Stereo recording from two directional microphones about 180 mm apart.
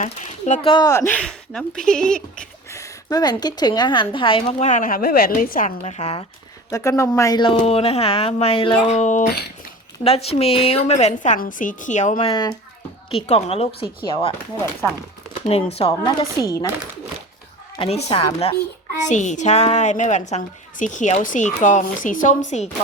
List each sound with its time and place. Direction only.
0.0 s speech: 40° left (ahead or behind)
0.7 s speech: 20° left (ahead or behind); by 2.1 s 5° left (ahead or behind)
2.4 s a woman's voice: 15° left (ahead or behind)
4.7 s a woman's voice: 50° left (ahead or behind)
6.7 s a woman's voice: 15° left (ahead or behind); by 12.3 s 40° left (ahead or behind)
12.3 s a woman's voice: 25° left (ahead or behind)
15.4 s a woman's voice: 35° left (ahead or behind)
15.8 s speech: 20° left (ahead or behind)
17.7 s a woman's voice: 30° left (ahead or behind)
18.9 s a woman's voice: 40° left (ahead or behind)